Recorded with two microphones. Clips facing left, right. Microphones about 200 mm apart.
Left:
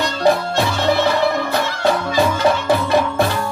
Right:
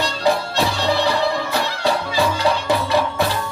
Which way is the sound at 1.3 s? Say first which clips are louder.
Left 2 dB; 55° left (ahead or behind).